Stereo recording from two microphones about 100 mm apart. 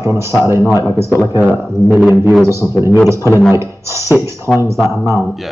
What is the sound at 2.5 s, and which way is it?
A man's voice, 25° right (ahead or behind).